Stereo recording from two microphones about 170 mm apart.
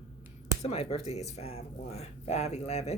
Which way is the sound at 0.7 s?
35° left (ahead or behind).